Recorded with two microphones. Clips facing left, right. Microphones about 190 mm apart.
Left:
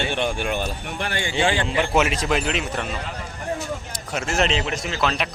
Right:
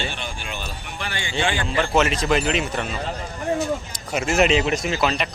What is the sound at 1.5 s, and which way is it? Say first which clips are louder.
Speech: even; 20° left (ahead or behind).